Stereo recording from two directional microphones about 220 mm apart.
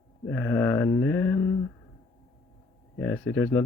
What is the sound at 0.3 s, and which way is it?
Speech, 10° left (ahead or behind).